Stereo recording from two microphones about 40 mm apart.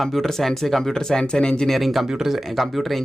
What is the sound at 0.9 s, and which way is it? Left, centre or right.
Speech, centre.